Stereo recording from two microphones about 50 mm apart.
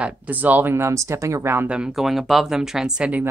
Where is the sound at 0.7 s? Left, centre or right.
Right.